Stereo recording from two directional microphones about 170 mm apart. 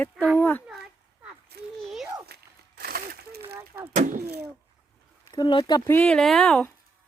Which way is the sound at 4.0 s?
50° right (ahead or behind).